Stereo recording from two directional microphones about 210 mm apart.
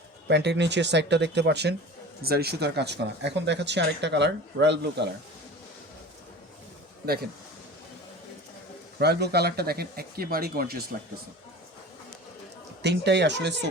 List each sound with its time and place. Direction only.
0.3 s speech: 55° right (ahead or behind)
7.0 s speech: 45° right (ahead or behind)
9.0 s speech: 50° right (ahead or behind)
12.8 s speech: 55° right (ahead or behind)